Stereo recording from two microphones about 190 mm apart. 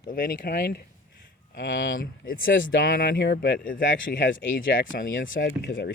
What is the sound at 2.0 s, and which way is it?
Speech, 45° left (ahead or behind).